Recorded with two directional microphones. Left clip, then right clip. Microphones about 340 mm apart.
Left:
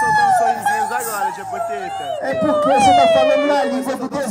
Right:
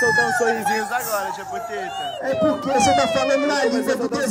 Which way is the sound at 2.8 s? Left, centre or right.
Left.